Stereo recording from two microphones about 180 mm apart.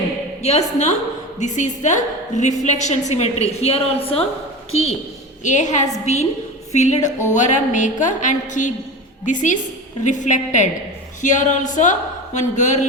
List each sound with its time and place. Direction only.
0.4 s a woman's voice: 40° left (ahead or behind)